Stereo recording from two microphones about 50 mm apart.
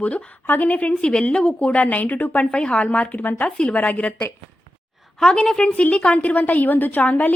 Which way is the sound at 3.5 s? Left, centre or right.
Left.